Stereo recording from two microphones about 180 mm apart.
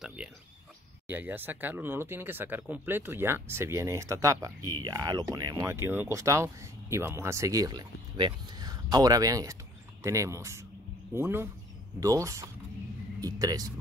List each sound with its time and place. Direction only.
0.0 s cricket: 5° right (ahead or behind)
1.0 s speech: 10° right (ahead or behind)